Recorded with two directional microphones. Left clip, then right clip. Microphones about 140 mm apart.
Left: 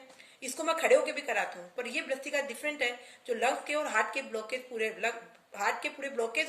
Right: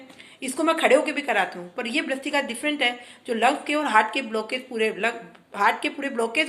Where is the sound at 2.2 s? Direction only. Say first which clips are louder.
Right 8 dB; 35° right (ahead or behind).